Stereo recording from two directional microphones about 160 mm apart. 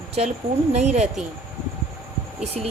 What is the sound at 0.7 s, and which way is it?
Speech, 45° right (ahead or behind).